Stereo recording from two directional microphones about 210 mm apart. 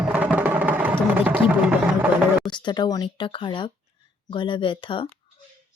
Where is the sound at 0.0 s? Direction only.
5° right (ahead or behind).